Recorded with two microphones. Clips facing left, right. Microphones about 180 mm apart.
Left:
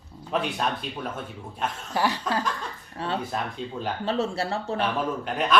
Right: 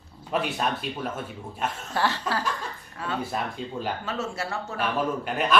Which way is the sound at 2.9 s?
30° left (ahead or behind).